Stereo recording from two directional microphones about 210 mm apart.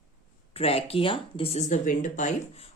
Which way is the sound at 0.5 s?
30° left (ahead or behind).